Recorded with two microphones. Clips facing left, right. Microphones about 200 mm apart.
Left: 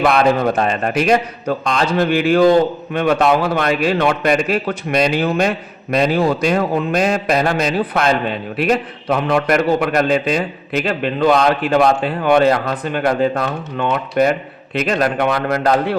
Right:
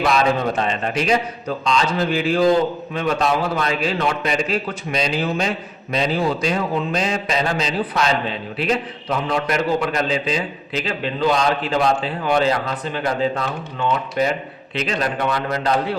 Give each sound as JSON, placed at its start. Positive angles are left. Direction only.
{"t": 0.0, "sound": "a man's voice", "side_deg": 55}